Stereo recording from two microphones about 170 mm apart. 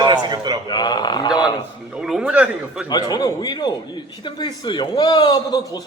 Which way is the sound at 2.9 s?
25° left (ahead or behind).